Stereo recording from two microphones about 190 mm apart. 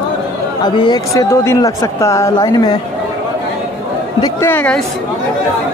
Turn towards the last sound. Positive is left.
turn(degrees=10)  # may be behind; listen again after turning